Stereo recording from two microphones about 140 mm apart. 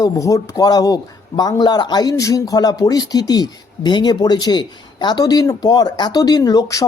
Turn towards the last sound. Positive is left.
turn(degrees=25)  # may be behind; listen again after turning